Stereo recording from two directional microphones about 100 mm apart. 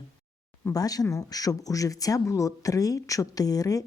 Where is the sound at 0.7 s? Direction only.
40° left (ahead or behind).